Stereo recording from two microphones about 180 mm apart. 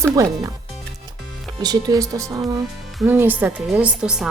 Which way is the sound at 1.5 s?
20° right (ahead or behind).